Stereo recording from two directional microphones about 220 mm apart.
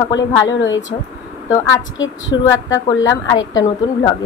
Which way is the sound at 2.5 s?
15° left (ahead or behind).